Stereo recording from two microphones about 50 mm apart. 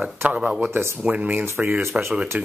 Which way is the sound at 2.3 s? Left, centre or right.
Right.